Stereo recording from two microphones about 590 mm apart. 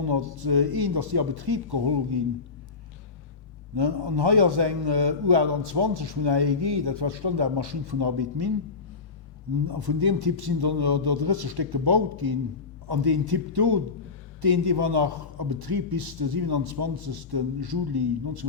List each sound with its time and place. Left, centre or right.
0.0 s a man's voice: right
3.8 s a man's voice: right
9.6 s a man's voice: right